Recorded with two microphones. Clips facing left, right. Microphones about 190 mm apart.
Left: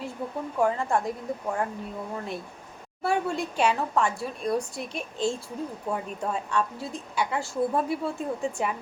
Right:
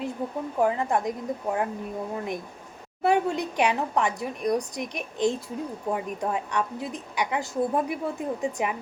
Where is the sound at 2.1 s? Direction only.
15° right (ahead or behind).